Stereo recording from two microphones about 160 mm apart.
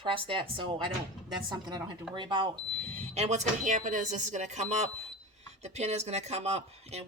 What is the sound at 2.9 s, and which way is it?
Speech, 40° right (ahead or behind).